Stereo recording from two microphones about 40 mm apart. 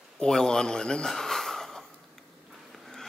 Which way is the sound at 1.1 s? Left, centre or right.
Centre.